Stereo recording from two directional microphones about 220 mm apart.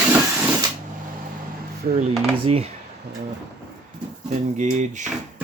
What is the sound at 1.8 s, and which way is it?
Speech, 30° right (ahead or behind).